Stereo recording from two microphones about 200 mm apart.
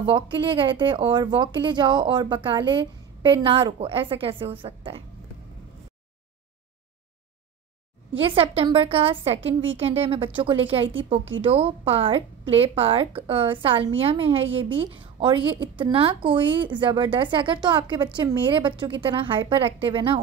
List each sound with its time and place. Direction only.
0.0 s speech: 25° right (ahead or behind)
8.1 s speech: 30° right (ahead or behind)
9.5 s a woman's voice: 70° right (ahead or behind)
9.8 s speech: 30° right (ahead or behind)